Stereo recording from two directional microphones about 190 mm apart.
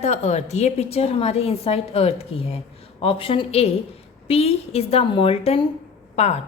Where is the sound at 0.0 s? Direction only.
35° left (ahead or behind).